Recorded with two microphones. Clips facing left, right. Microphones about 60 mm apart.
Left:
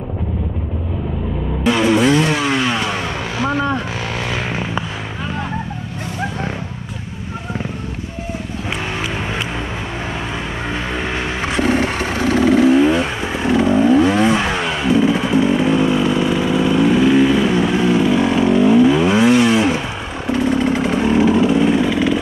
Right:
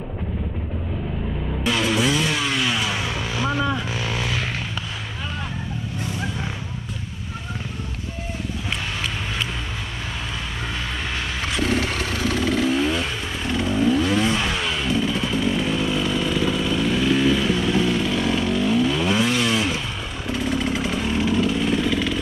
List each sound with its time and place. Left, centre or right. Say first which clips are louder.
1.7 s music: left 7 dB; centre
2.3 s vehicle: left 5 dB; left
10.7 s a sound: left 7 dB; left
14.0 s vehicle: left 6 dB; centre
14.3 s chainsaw: left 6 dB; left
20.9 s vehicle: left 9 dB; centre